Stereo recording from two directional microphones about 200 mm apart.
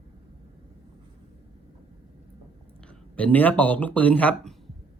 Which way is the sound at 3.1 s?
5° left (ahead or behind).